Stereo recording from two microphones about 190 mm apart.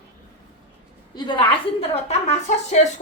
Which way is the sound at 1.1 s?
25° left (ahead or behind).